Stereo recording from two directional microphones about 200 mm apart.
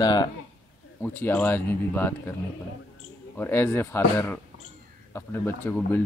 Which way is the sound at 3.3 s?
10° left (ahead or behind).